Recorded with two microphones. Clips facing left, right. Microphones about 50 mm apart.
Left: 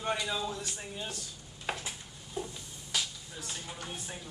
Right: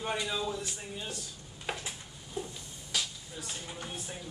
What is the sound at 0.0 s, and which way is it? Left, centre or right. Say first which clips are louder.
Speech: even; centre.